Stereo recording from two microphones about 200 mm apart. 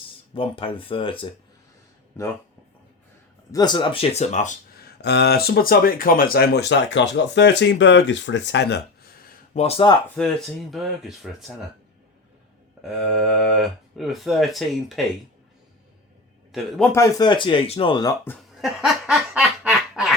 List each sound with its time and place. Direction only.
0.3 s speech: 25° left (ahead or behind)
3.5 s speech: 20° left (ahead or behind); by 4.5 s 35° left (ahead or behind)
4.8 s speech: 55° left (ahead or behind)
9.6 s speech: 30° left (ahead or behind)
10.2 s speech: centre (ahead or behind)
12.9 s speech: centre (ahead or behind)
16.5 s a man's voice: centre (ahead or behind)
16.9 s speech: 15° left (ahead or behind)
18.6 s snicker: 5° right (ahead or behind)